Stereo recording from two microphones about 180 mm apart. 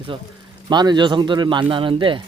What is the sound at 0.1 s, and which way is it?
Speech, 25° right (ahead or behind).